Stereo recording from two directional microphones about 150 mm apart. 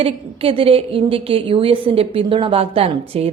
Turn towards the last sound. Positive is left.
turn(degrees=-40)  # may be behind; listen again after turning